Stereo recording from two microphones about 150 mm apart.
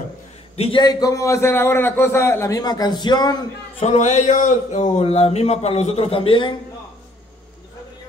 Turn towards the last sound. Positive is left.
turn(degrees=35)  # may be behind; listen again after turning